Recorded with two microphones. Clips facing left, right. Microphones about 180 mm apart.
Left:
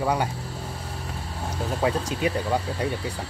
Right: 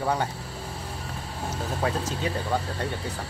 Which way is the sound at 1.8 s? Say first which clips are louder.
Left 4 dB; 15° left (ahead or behind).